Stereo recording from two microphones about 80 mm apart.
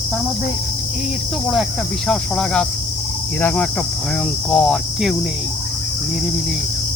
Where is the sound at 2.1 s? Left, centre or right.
Centre.